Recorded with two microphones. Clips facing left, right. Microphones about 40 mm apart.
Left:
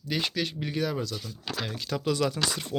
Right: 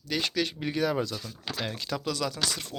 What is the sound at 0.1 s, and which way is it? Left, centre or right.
Speech, centre.